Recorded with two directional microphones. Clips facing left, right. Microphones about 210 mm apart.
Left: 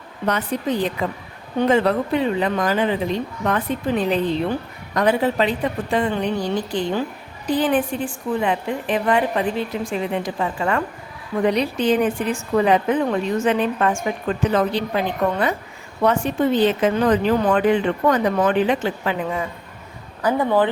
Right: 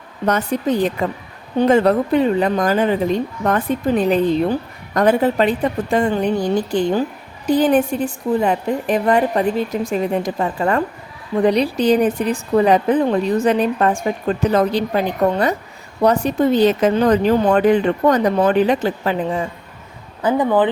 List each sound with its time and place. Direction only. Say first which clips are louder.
0.3 s a woman's voice: right 4 dB; 45° right (ahead or behind)
20.2 s speech: right 2 dB; 15° right (ahead or behind)